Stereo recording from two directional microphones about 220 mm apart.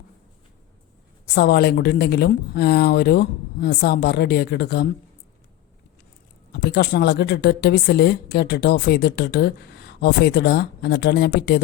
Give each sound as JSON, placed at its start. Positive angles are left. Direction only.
{"t": 1.4, "sound": "speech", "side_deg": 45}
{"t": 6.5, "sound": "speech", "side_deg": 50}